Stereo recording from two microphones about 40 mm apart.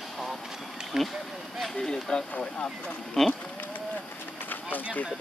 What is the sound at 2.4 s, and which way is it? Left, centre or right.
Speech, left.